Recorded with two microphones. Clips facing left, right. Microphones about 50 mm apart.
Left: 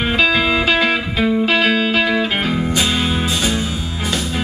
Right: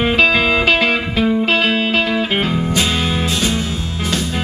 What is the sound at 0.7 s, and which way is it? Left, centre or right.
Music, centre.